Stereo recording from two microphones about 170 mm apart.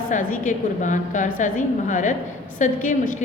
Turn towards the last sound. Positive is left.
turn(degrees=50)  # may be behind; listen again after turning